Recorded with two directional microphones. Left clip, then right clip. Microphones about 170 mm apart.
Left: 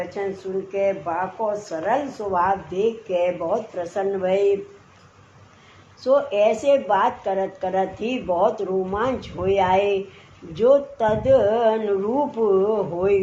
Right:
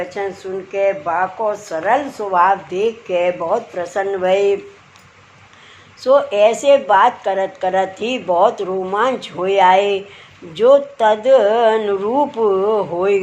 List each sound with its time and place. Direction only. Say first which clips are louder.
0.2 s a woman's voice: right 3 dB; 40° right (ahead or behind)
6.0 s a woman's voice: right 6 dB; 40° right (ahead or behind)
12.4 s speech: right 4 dB; 50° right (ahead or behind)